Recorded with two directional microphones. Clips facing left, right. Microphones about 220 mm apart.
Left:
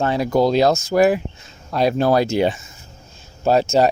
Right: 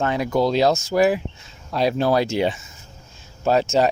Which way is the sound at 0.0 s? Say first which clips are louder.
Left 3 dB; 35° left (ahead or behind).